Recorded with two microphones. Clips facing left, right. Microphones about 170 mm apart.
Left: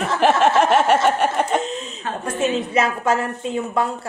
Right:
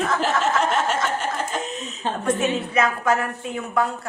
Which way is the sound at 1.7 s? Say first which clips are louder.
Left 3 dB; 30° left (ahead or behind).